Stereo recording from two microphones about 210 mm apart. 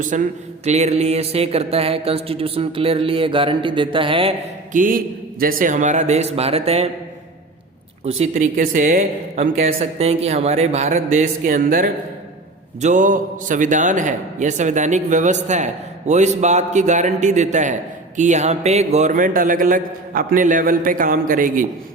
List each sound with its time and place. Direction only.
0.1 s a man's voice: 35° right (ahead or behind)
0.6 s mantra: 30° right (ahead or behind)
4.7 s a man's voice: 40° right (ahead or behind)
8.0 s a man's voice: 35° right (ahead or behind)